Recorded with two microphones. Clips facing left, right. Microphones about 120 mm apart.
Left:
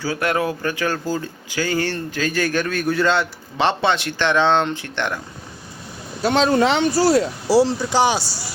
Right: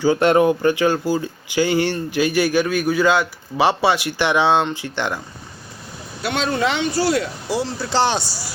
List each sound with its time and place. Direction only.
0.0 s speech: 25° right (ahead or behind)
6.2 s speech: 35° left (ahead or behind)
7.9 s speech: 10° left (ahead or behind)